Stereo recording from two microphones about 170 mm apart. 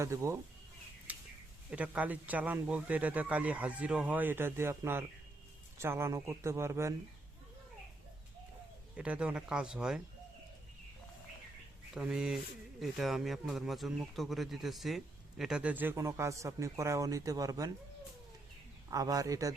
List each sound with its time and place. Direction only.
0.0 s a man's voice: 15° right (ahead or behind)
1.1 s a sound: 10° right (ahead or behind)
1.7 s a man's voice: 10° right (ahead or behind)
9.0 s speech: 5° right (ahead or behind)
11.9 s speech: 5° right (ahead or behind); by 17.7 s 20° right (ahead or behind)
18.9 s a man's voice: 20° right (ahead or behind)